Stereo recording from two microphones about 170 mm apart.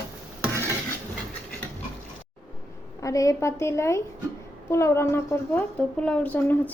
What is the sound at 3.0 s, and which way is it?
A woman's voice, 20° left (ahead or behind).